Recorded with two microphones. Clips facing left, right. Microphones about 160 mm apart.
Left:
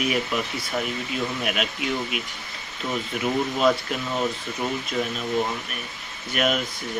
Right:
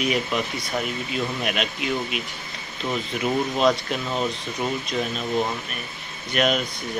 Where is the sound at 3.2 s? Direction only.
5° left (ahead or behind).